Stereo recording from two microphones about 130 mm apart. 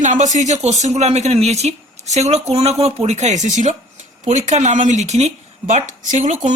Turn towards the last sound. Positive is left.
turn(degrees=-65)  # may be behind; listen again after turning